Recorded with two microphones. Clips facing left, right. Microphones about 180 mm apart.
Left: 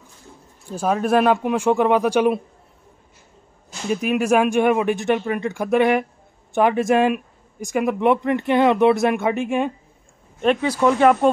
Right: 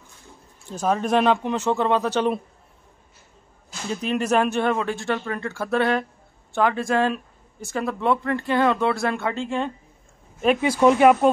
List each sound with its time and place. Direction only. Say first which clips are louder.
0.7 s speech: left 2 dB; 10° left (ahead or behind)
3.9 s speech: left 4 dB; 10° left (ahead or behind)
10.6 s speech: right 2 dB; 15° right (ahead or behind)